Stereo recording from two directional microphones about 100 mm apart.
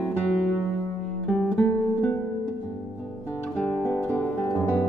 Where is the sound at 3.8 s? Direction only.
20° left (ahead or behind).